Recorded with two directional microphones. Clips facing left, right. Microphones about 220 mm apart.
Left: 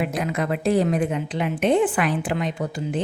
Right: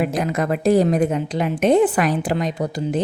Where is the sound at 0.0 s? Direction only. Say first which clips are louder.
Right 4 dB; 45° right (ahead or behind).